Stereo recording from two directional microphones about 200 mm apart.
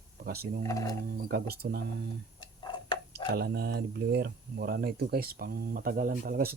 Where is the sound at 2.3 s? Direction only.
20° left (ahead or behind).